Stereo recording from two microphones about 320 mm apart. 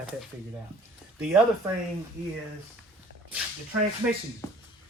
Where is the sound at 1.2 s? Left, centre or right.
Centre.